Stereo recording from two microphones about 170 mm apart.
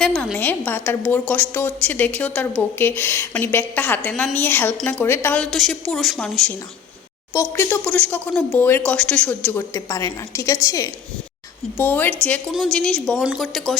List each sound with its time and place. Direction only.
0.0 s a woman's voice: centre (ahead or behind)
7.3 s a woman's voice: 15° left (ahead or behind)